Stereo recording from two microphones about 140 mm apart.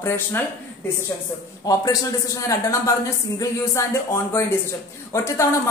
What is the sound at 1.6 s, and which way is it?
A man's voice, 25° left (ahead or behind).